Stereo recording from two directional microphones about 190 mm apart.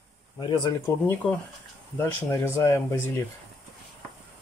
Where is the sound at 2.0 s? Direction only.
15° left (ahead or behind).